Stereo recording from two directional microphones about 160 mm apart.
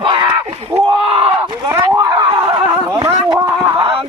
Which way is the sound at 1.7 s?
25° right (ahead or behind).